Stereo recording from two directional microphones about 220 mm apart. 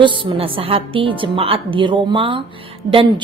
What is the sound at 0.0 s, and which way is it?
A woman's voice, 20° right (ahead or behind).